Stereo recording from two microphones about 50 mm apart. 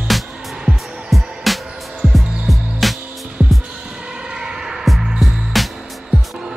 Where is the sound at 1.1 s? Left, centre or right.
Centre.